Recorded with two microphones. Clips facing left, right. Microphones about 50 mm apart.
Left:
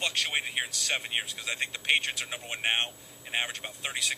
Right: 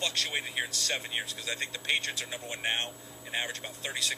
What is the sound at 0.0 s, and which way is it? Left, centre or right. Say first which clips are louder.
Speech: left 2 dB; left.